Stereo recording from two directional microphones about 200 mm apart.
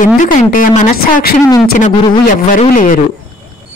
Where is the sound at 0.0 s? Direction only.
40° left (ahead or behind).